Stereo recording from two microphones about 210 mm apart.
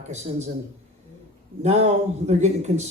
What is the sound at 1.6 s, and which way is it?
Speech, 35° right (ahead or behind).